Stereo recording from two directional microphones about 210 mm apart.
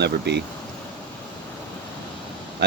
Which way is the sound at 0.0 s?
55° right (ahead or behind).